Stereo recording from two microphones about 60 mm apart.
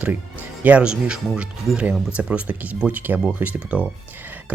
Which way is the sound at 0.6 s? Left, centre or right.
Right.